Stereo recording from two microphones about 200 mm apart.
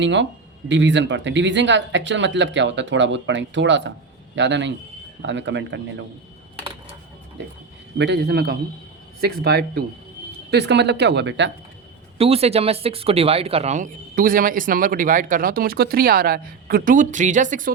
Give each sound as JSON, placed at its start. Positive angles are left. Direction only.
{"t": 0.0, "sound": "speech", "side_deg": -65}
{"t": 7.9, "sound": "speech", "side_deg": -60}
{"t": 12.1, "sound": "speech", "side_deg": -30}